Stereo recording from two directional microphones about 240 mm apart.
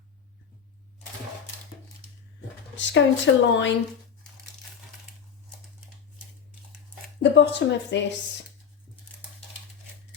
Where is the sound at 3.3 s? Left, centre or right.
Left.